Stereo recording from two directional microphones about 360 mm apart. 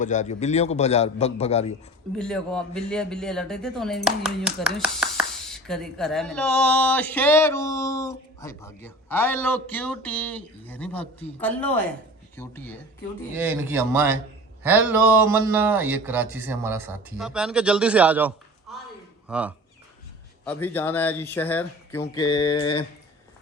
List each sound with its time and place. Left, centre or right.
0.0 s a man's voice: centre
2.1 s a man's voice: centre
13.3 s a man's voice: centre